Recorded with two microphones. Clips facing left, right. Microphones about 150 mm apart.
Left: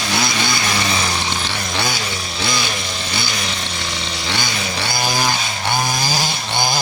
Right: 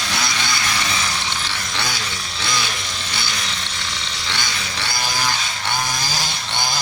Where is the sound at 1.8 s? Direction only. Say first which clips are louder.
Left 4 dB; 10° left (ahead or behind).